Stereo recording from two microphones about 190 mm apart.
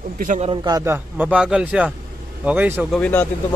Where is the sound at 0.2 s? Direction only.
45° right (ahead or behind).